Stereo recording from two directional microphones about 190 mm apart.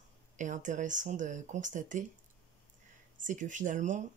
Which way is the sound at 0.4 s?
40° right (ahead or behind).